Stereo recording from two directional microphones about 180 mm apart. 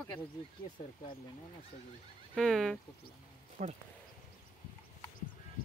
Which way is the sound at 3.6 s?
45° right (ahead or behind).